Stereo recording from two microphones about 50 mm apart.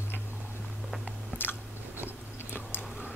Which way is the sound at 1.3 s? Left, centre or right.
Left.